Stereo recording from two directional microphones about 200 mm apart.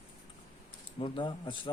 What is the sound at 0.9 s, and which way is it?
Speech, 25° left (ahead or behind).